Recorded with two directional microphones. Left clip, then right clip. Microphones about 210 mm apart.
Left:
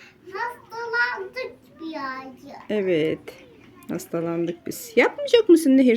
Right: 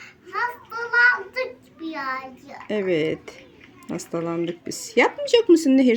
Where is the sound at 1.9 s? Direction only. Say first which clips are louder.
Right 3 dB; 20° left (ahead or behind).